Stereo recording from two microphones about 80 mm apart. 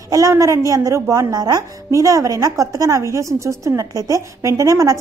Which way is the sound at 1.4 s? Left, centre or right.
Right.